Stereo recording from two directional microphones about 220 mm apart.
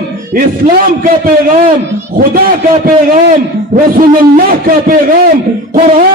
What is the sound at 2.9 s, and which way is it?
A man's voice, 35° right (ahead or behind).